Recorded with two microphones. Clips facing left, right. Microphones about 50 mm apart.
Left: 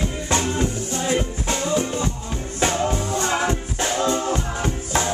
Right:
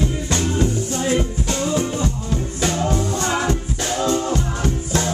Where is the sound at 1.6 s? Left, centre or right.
Centre.